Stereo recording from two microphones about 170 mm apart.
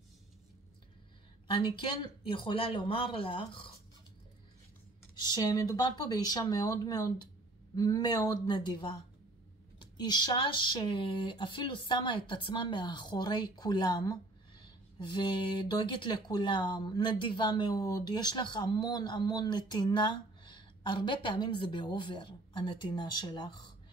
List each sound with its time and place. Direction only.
1.5 s speech: 30° left (ahead or behind)
5.2 s speech: 25° left (ahead or behind)